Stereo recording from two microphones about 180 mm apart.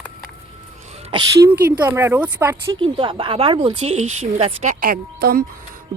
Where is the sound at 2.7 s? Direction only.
30° right (ahead or behind); by 5.4 s 55° right (ahead or behind).